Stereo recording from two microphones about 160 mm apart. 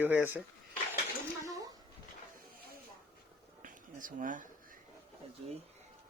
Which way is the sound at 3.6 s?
55° right (ahead or behind).